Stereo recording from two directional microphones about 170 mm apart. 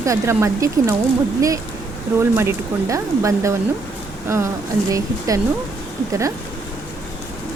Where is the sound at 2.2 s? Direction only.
15° right (ahead or behind).